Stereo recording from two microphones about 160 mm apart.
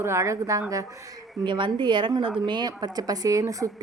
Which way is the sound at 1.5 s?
30° right (ahead or behind).